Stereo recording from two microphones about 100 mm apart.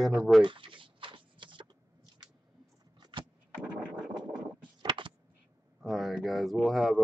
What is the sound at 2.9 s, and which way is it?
Vehicle, 50° right (ahead or behind).